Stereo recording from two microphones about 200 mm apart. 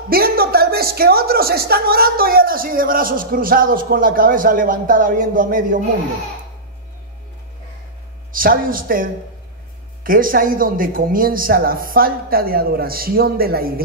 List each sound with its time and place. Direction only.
0.1 s speech: 50° right (ahead or behind)
8.3 s speech: 45° right (ahead or behind)